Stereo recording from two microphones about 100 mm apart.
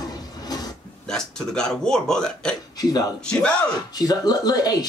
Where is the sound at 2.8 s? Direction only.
40° left (ahead or behind).